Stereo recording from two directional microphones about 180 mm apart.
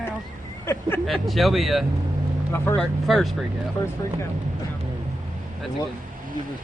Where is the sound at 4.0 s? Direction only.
15° left (ahead or behind).